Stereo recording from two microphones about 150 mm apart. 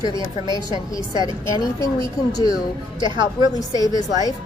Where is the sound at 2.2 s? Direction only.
25° left (ahead or behind).